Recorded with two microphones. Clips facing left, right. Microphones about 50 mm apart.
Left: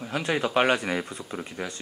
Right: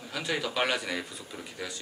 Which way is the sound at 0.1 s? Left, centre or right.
Left.